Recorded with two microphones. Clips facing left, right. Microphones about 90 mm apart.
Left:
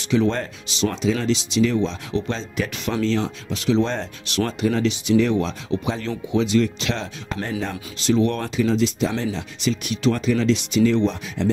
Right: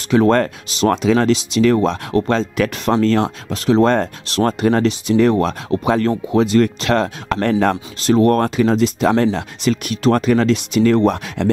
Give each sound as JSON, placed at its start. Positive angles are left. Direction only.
{"t": 0.1, "sound": "speech", "side_deg": -55}
{"t": 8.0, "sound": "speech", "side_deg": -50}